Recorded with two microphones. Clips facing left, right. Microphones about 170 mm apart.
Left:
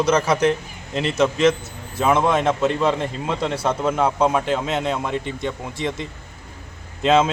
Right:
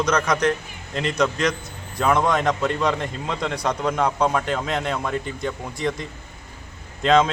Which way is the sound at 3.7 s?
5° left (ahead or behind).